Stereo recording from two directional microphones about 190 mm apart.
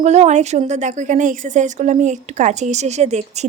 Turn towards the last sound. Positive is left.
turn(degrees=-35)  # may be behind; listen again after turning